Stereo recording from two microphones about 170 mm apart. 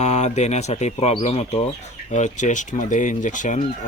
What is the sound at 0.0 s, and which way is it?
Speech, 40° left (ahead or behind).